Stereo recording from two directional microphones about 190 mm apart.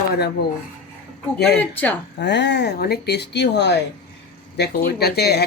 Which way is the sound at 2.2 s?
65° left (ahead or behind).